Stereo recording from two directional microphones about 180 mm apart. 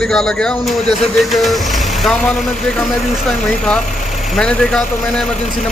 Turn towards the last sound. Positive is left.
turn(degrees=0)  # may be behind; listen again after turning